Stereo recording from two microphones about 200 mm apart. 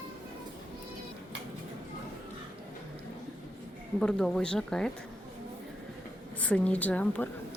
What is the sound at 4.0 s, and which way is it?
Speech, 5° left (ahead or behind).